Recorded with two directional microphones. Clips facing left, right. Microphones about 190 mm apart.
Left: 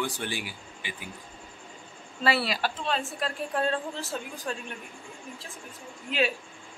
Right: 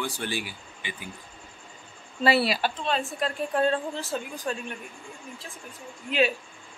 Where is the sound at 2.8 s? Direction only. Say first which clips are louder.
Right 2 dB; centre (ahead or behind).